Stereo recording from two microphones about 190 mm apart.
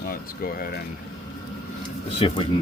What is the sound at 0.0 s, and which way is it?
Speech, 50° left (ahead or behind).